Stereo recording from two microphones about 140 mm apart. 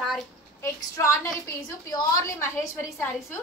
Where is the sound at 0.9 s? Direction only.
20° left (ahead or behind).